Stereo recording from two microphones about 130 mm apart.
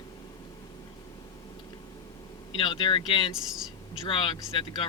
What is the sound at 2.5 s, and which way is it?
Speech, 40° left (ahead or behind).